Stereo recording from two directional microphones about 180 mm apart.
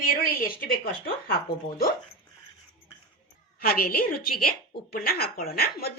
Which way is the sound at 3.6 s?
55° left (ahead or behind).